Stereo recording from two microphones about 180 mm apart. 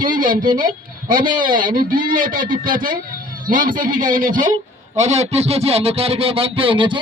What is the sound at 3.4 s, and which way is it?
Music, 50° right (ahead or behind).